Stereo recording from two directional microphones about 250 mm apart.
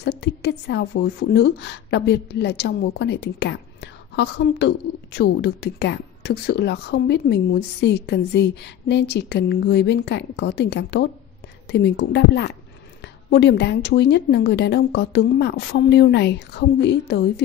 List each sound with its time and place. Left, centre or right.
0.0 s a woman's voice: left